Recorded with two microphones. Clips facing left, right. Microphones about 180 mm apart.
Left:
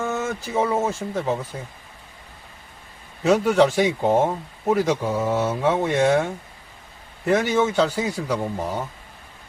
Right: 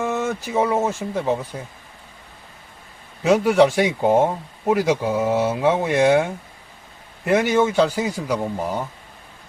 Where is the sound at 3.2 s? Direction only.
5° right (ahead or behind).